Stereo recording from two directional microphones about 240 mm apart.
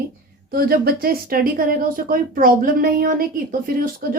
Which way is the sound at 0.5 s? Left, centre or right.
Right.